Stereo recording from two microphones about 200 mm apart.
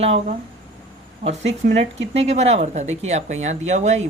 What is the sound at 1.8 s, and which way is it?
Speech, 35° right (ahead or behind).